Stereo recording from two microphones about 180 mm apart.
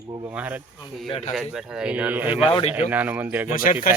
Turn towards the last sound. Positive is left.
turn(degrees=50)  # may be behind; listen again after turning